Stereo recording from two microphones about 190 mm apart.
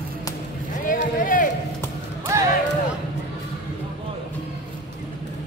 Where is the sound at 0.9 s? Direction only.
45° left (ahead or behind).